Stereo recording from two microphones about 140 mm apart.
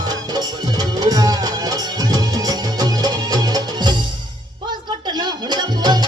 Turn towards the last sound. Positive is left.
turn(degrees=-30)  # may be behind; listen again after turning